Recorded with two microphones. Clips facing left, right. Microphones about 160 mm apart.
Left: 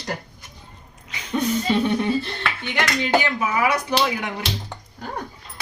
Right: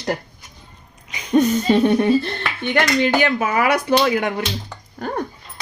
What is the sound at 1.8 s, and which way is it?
Speech, 55° right (ahead or behind).